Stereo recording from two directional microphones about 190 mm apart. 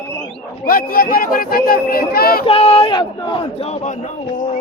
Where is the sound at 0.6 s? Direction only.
50° left (ahead or behind).